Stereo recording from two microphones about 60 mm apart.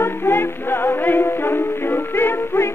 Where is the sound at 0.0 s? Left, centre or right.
Left.